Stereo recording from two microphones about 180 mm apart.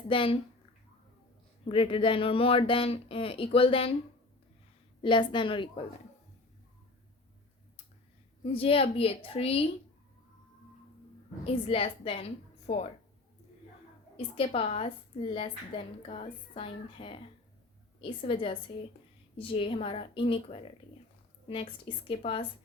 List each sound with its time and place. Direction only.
0.1 s a woman's voice: 30° left (ahead or behind)
1.6 s speech: 30° left (ahead or behind)
5.0 s a woman's voice: 25° left (ahead or behind)
8.5 s speech: 30° left (ahead or behind)
11.4 s speech: 30° left (ahead or behind)
14.2 s a woman's voice: 30° left (ahead or behind)